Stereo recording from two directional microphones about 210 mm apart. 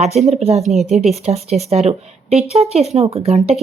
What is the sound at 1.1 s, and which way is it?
Speech, 30° right (ahead or behind).